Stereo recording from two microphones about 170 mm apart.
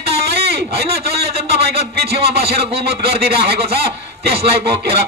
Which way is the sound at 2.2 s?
70° right (ahead or behind).